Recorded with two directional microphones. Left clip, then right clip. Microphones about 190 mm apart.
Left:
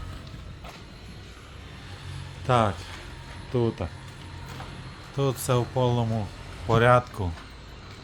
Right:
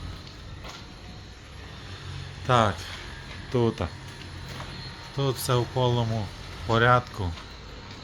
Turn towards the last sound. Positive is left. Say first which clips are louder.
# left 1 dB
turn(degrees=15)  # may be behind; listen again after turning